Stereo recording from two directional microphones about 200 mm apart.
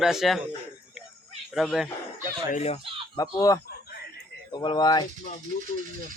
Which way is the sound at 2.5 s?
30° left (ahead or behind).